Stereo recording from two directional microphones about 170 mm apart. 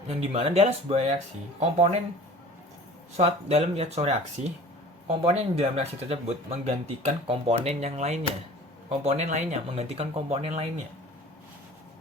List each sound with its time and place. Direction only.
0.1 s speech: 35° right (ahead or behind)
3.2 s speech: 40° right (ahead or behind)